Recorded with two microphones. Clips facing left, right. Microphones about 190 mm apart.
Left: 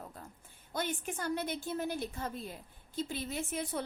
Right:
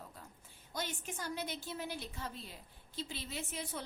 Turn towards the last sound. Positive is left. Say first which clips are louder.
# left 6 dB
turn(degrees=50)  # may be behind; listen again after turning